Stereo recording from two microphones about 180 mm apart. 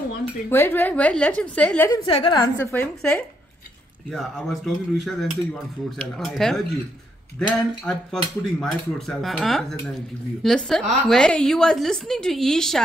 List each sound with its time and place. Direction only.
0.5 s a woman's voice: 10° left (ahead or behind)
2.0 s a woman's voice: 30° left (ahead or behind)
2.6 s a woman's voice: 10° left (ahead or behind)